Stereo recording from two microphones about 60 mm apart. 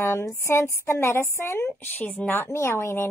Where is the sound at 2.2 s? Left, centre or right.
Left.